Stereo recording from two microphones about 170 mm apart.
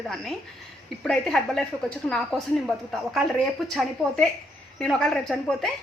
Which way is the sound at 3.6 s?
Centre (ahead or behind).